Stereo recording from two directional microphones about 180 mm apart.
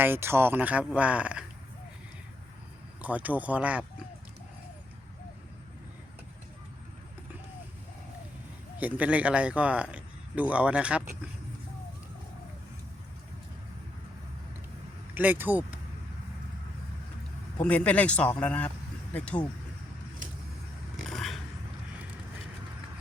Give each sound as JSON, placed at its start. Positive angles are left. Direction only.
{"t": 0.0, "sound": "a man's voice", "side_deg": -10}
{"t": 3.0, "sound": "a man's voice", "side_deg": -10}
{"t": 8.8, "sound": "a man's voice", "side_deg": -5}
{"t": 15.1, "sound": "speech", "side_deg": -10}
{"t": 17.6, "sound": "speech", "side_deg": 10}
{"t": 20.9, "sound": "a sound", "side_deg": 0}